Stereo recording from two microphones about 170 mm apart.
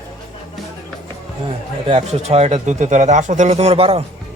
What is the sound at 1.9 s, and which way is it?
Speech, 40° right (ahead or behind).